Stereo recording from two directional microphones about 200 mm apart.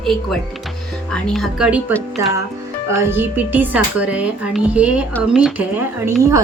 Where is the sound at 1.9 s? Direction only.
5° left (ahead or behind).